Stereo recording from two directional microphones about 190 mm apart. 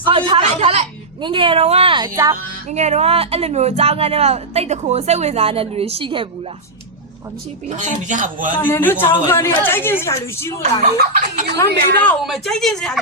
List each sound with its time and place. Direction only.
0.0 s a woman's voice: 25° right (ahead or behind)
2.6 s speech: 35° right (ahead or behind)
7.8 s speech: 40° right (ahead or behind)
8.5 s a woman's voice: 10° left (ahead or behind)
11.5 s a woman's voice: 15° left (ahead or behind)
12.2 s speech: centre (ahead or behind)